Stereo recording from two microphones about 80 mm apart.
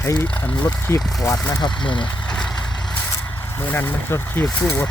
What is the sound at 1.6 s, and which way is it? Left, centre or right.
Speech, left.